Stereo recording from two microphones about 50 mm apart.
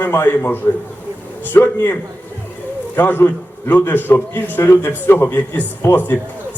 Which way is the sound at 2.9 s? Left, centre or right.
Left.